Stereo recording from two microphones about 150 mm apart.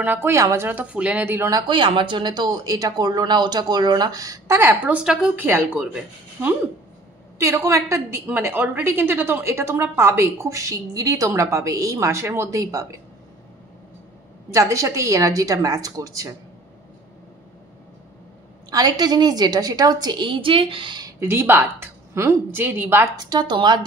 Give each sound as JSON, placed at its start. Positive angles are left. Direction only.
{"t": 0.0, "sound": "a woman's voice", "side_deg": -15}
{"t": 1.7, "sound": "a woman's voice", "side_deg": -30}
{"t": 14.5, "sound": "a woman's voice", "side_deg": -20}
{"t": 18.7, "sound": "a woman's voice", "side_deg": -25}
{"t": 21.2, "sound": "a woman's voice", "side_deg": -15}
{"t": 23.1, "sound": "a woman's voice", "side_deg": -30}